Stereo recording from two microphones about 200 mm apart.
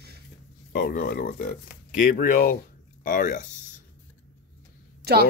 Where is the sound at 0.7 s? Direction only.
45° left (ahead or behind).